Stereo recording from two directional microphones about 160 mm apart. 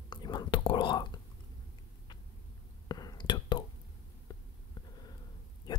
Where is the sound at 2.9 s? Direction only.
25° left (ahead or behind).